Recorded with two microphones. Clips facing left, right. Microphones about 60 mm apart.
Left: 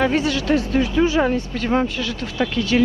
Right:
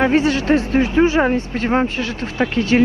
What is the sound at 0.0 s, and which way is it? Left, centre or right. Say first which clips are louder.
Speech: right 4 dB; right.